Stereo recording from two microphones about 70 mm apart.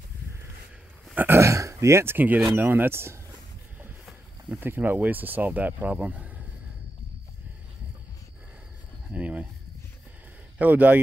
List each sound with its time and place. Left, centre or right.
1.1 s a sound: right
1.4 s speech: right
2.1 s speech: right
4.5 s speech: right
9.1 s speech: centre
10.6 s speech: right